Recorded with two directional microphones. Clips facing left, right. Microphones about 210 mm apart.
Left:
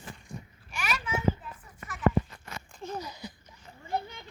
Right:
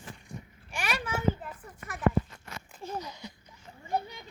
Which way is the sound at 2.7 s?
Centre (ahead or behind).